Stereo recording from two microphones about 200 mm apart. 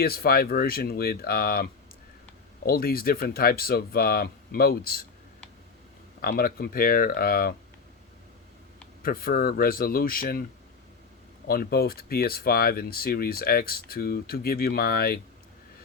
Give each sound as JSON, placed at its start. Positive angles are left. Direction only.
{"t": 0.0, "sound": "speech", "side_deg": 50}
{"t": 2.6, "sound": "speech", "side_deg": 50}
{"t": 6.2, "sound": "speech", "side_deg": 50}
{"t": 9.0, "sound": "speech", "side_deg": 45}
{"t": 11.4, "sound": "speech", "side_deg": 50}